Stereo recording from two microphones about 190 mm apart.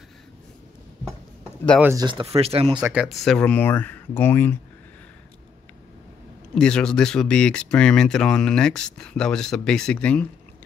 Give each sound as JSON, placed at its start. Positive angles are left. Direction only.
{"t": 1.8, "sound": "speech", "side_deg": -10}
{"t": 2.0, "sound": "speech", "side_deg": -30}
{"t": 2.8, "sound": "speech", "side_deg": -5}
{"t": 6.5, "sound": "speech", "side_deg": 5}